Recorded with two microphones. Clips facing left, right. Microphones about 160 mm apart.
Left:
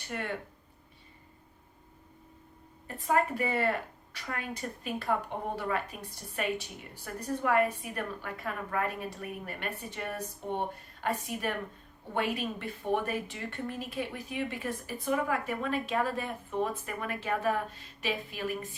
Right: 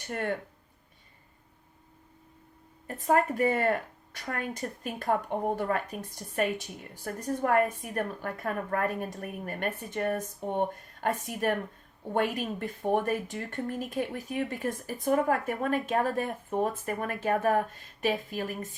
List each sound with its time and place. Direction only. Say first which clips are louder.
0.1 s speech: right 3 dB; 45° right (ahead or behind)
2.8 s speech: right 3 dB; 45° right (ahead or behind)